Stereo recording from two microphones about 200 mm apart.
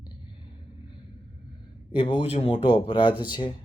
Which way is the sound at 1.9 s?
25° left (ahead or behind).